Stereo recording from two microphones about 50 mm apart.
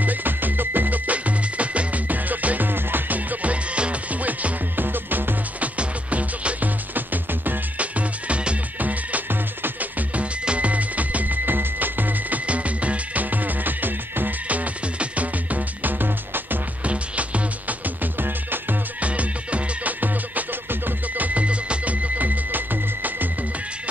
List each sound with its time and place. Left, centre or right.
0.0 s music: right
5.6 s music: right
7.8 s music: right
16.8 s music: right
18.2 s music: right
18.9 s music: right